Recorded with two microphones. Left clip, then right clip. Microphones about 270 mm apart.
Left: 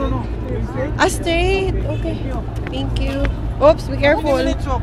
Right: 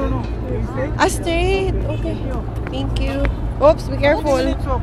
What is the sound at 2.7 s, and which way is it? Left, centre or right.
Speech, centre.